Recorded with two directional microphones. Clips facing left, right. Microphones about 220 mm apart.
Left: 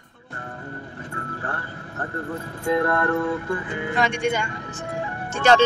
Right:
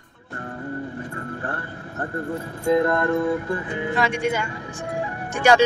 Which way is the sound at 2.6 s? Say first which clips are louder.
Right 2 dB; 20° right (ahead or behind).